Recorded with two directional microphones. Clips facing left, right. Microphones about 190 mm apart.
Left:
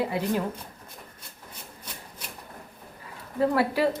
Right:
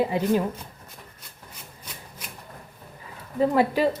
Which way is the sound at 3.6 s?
15° right (ahead or behind).